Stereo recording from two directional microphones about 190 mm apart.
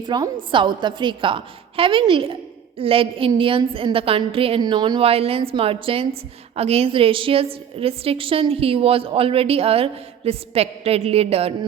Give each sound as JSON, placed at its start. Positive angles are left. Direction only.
{"t": 0.1, "sound": "a woman's voice", "side_deg": -25}